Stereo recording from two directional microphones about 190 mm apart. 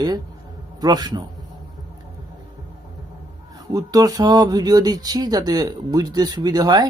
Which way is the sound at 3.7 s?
20° right (ahead or behind).